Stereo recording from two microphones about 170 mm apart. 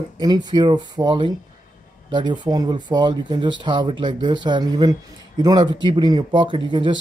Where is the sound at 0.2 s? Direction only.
25° right (ahead or behind).